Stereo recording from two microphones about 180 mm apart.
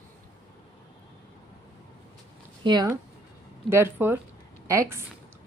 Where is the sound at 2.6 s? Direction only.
20° right (ahead or behind).